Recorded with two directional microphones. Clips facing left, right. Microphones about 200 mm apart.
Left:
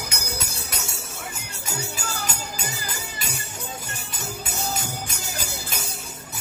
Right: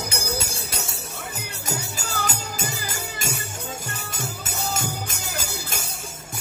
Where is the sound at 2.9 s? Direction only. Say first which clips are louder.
Right 3 dB; 45° right (ahead or behind).